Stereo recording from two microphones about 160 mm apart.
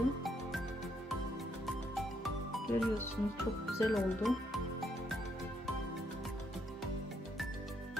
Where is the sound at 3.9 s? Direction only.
Centre (ahead or behind).